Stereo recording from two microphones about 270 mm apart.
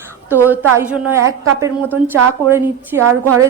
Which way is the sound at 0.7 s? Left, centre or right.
Centre.